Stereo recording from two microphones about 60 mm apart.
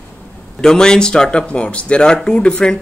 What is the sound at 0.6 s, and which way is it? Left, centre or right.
Speech, centre.